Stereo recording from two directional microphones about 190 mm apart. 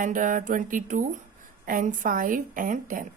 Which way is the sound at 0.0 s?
45° right (ahead or behind).